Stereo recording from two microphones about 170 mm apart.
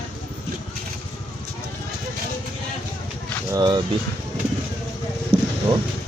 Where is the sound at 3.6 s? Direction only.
25° right (ahead or behind).